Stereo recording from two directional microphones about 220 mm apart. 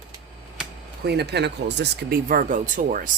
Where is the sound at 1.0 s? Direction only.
50° right (ahead or behind).